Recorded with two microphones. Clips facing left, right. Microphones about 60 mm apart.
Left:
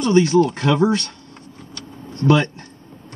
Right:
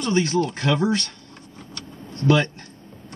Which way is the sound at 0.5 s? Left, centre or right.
Centre.